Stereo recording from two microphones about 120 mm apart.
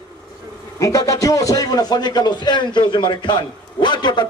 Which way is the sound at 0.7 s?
25° left (ahead or behind).